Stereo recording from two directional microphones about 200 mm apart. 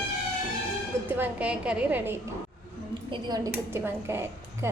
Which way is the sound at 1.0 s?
10° right (ahead or behind).